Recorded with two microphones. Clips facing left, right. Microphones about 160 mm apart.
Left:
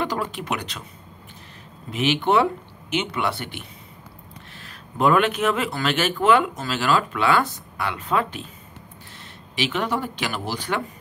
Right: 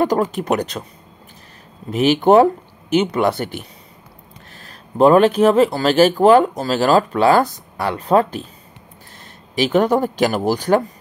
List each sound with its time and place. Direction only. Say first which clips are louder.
0.0 s speech: right 9 dB; 45° right (ahead or behind)
1.9 s speech: right 8 dB; 40° right (ahead or behind)
9.6 s speech: right 9 dB; 40° right (ahead or behind)